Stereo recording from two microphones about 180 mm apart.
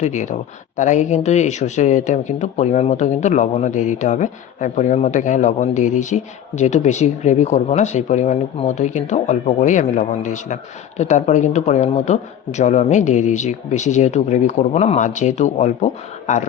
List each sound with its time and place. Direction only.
0.0 s speech: 40° left (ahead or behind)